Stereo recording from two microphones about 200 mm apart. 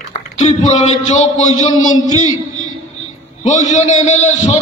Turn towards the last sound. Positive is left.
turn(degrees=35)  # may be behind; listen again after turning